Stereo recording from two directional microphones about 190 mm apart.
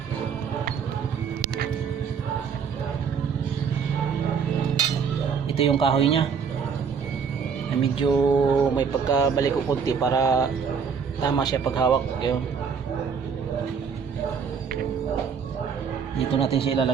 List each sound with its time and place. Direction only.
5.5 s speech: 30° left (ahead or behind)
7.8 s speech: 25° left (ahead or behind)
16.3 s speech: 30° left (ahead or behind)